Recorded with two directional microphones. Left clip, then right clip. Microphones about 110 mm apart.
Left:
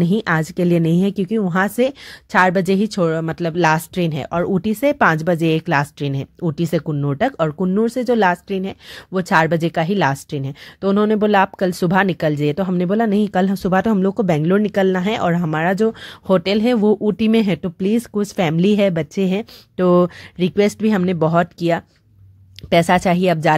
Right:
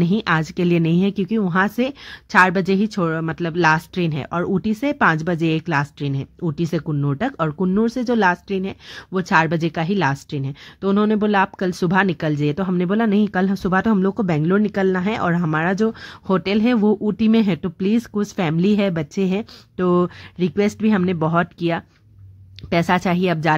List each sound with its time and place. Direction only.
0.0 s a woman's voice: 45° left (ahead or behind)